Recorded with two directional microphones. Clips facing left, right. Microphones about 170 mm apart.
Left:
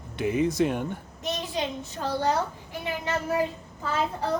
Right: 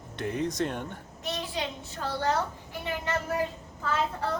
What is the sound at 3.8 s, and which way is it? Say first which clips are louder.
Speech: left 1 dB; 15° left (ahead or behind).